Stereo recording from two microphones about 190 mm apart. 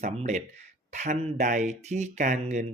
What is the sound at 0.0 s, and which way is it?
Speech, 40° right (ahead or behind).